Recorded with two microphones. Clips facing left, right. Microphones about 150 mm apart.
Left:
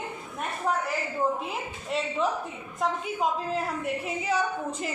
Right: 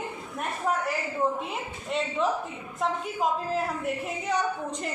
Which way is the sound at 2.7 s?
Centre (ahead or behind).